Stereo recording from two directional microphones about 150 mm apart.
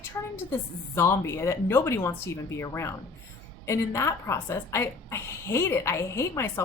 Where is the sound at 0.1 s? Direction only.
15° left (ahead or behind).